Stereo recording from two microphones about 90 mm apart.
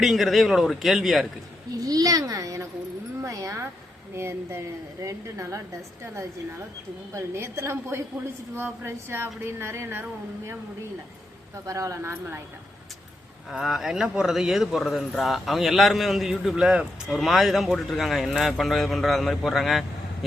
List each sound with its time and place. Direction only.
0.0 s speech: centre (ahead or behind)
1.8 s a woman's voice: 45° right (ahead or behind)
7.1 s a woman's voice: 30° right (ahead or behind)
11.6 s a woman's voice: 35° right (ahead or behind)
13.5 s speech: centre (ahead or behind)